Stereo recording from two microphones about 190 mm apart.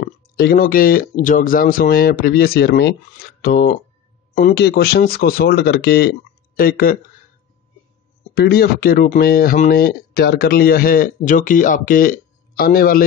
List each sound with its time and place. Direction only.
0.0 s speech: 50° left (ahead or behind)
8.4 s speech: 55° left (ahead or behind)